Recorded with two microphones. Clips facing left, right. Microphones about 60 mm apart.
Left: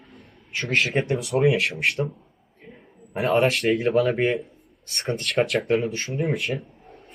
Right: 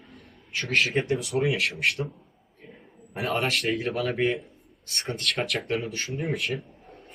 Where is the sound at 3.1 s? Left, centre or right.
Left.